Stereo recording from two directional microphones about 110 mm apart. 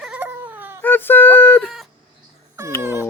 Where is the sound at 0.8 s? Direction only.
20° left (ahead or behind).